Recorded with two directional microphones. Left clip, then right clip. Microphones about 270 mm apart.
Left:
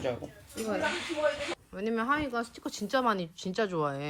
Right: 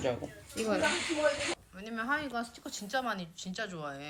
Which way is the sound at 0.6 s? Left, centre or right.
Centre.